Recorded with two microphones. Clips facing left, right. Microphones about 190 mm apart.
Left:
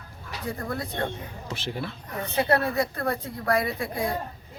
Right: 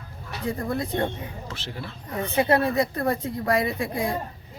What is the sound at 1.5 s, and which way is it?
Speech, 15° left (ahead or behind).